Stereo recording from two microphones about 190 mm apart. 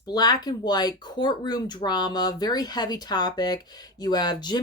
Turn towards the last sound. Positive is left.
turn(degrees=20)  # may be behind; listen again after turning